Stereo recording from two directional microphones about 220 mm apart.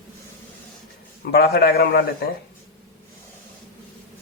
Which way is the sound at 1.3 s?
45° left (ahead or behind).